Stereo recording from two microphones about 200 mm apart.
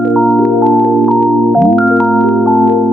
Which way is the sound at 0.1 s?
Centre (ahead or behind).